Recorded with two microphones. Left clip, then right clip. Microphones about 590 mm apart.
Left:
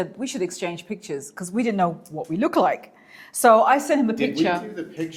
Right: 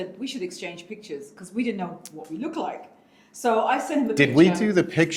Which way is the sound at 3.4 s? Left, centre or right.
Left.